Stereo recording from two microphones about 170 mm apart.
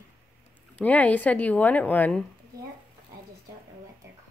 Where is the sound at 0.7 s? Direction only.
10° left (ahead or behind).